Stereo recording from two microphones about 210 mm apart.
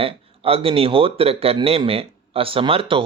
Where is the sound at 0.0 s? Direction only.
25° right (ahead or behind).